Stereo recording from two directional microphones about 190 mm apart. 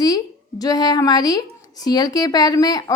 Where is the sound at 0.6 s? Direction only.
20° left (ahead or behind).